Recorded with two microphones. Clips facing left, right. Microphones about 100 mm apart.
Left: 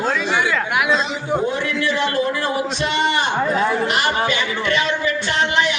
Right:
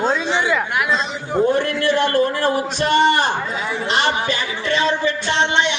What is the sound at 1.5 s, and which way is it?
A man's voice, 50° right (ahead or behind).